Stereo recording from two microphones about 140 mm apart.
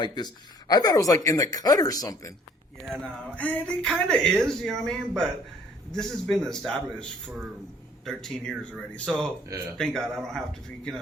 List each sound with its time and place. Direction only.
0.0 s speech: 30° left (ahead or behind)
2.8 s speech: 5° left (ahead or behind)